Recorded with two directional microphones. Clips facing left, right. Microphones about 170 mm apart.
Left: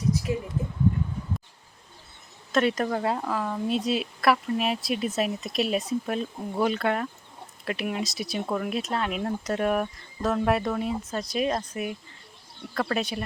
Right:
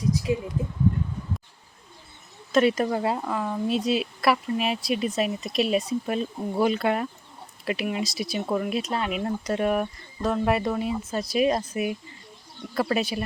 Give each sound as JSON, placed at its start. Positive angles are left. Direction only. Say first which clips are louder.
{"t": 0.3, "sound": "speech", "louder": "right 3 dB", "side_deg": -20}
{"t": 2.5, "sound": "a woman's voice", "louder": "right 3 dB", "side_deg": -5}